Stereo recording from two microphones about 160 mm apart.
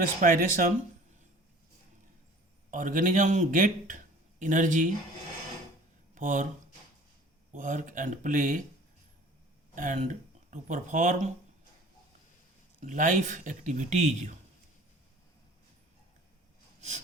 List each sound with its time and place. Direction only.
0.2 s speech: 55° right (ahead or behind)
2.6 s a man's voice: 55° right (ahead or behind)
6.1 s speech: 50° right (ahead or behind)
7.5 s speech: 50° right (ahead or behind)
9.7 s speech: 50° right (ahead or behind)
12.8 s speech: 55° right (ahead or behind)